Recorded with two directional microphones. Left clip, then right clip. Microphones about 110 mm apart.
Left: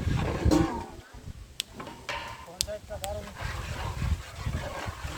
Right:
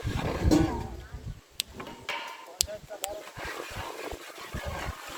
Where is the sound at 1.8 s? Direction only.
70° right (ahead or behind).